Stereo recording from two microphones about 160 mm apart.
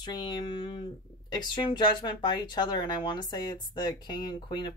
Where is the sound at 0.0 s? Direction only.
25° left (ahead or behind).